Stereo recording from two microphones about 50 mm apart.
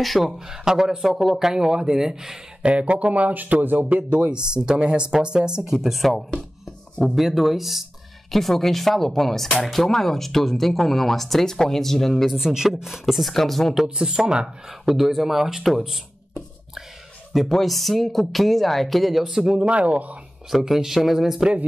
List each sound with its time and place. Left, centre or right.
0.0 s speech: centre
0.5 s speech: centre
1.4 s speech: centre
2.6 s speech: right
4.1 s speech: right; by 12.4 s centre
12.4 s speech: centre
13.8 s speech: centre
14.7 s speech: centre
17.3 s speech: centre
19.7 s speech: right
20.4 s speech: centre